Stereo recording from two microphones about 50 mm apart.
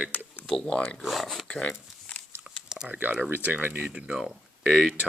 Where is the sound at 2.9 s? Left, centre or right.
Right.